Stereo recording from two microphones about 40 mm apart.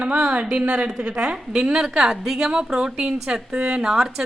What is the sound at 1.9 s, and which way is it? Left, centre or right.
A woman's voice, centre.